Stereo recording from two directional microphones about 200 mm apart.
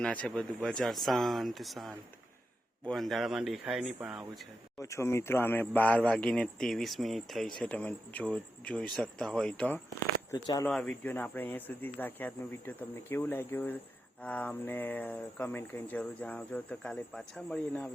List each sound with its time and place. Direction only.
0.0 s a man's voice: 5° left (ahead or behind)
4.8 s a man's voice: 15° left (ahead or behind)
10.3 s speech: 20° left (ahead or behind)
10.7 s speech: centre (ahead or behind)